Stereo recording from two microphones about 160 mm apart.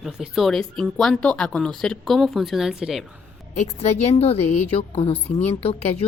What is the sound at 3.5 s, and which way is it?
Speech, 45° left (ahead or behind).